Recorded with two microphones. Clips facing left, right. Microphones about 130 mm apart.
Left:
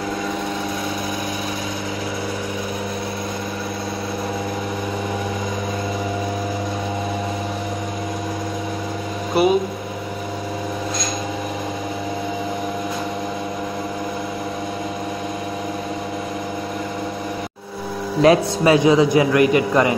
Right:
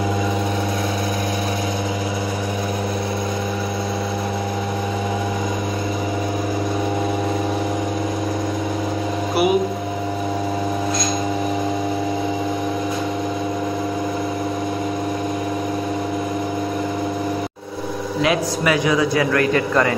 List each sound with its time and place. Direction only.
9.4 s mains hum: 10° right (ahead or behind)
18.2 s a man's voice: 30° left (ahead or behind)